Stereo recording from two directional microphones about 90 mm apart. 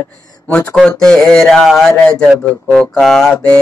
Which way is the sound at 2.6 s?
10° left (ahead or behind).